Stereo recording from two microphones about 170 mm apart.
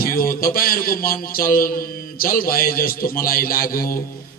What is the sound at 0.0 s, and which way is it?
A man's voice, 60° left (ahead or behind).